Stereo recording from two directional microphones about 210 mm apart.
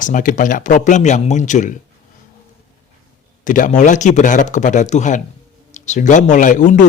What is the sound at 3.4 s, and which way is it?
A man's voice, 40° left (ahead or behind).